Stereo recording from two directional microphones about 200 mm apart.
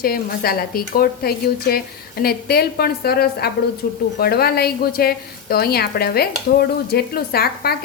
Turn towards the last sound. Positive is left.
turn(degrees=50)  # may be behind; listen again after turning